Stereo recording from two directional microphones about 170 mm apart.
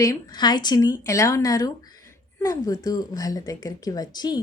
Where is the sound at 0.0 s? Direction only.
20° left (ahead or behind).